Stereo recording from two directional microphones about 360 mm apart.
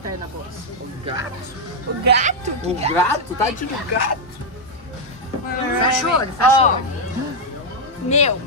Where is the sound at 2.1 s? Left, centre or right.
Centre.